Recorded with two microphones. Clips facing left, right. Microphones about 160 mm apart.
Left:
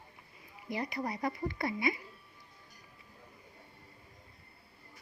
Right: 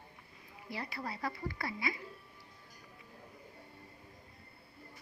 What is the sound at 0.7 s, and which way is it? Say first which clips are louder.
Speech: left 6 dB; 15° left (ahead or behind).